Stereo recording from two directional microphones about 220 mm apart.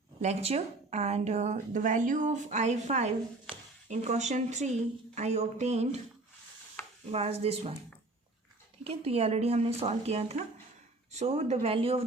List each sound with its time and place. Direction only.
0.2 s a woman's voice: 30° right (ahead or behind)
7.0 s speech: 30° right (ahead or behind)
8.8 s speech: 25° right (ahead or behind)